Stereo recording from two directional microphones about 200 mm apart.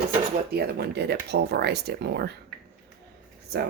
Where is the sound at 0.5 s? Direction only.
50° right (ahead or behind).